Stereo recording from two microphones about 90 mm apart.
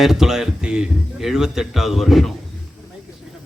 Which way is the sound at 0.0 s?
5° right (ahead or behind).